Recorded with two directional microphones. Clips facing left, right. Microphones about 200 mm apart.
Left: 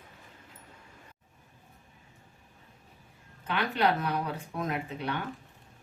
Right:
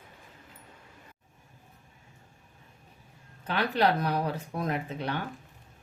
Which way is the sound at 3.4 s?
35° right (ahead or behind).